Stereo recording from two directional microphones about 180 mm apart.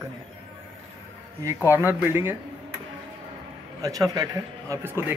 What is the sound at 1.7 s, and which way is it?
Speech, 10° right (ahead or behind).